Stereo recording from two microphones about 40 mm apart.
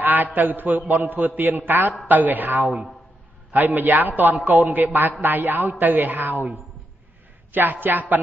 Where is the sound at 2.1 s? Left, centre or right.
Right.